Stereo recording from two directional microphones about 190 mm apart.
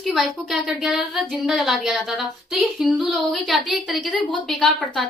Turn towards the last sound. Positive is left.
turn(degrees=0)  # may be behind; listen again after turning